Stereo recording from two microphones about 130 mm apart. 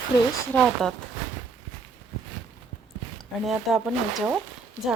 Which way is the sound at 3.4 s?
5° right (ahead or behind).